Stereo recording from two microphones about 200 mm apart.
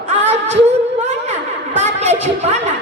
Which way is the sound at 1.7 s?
35° right (ahead or behind).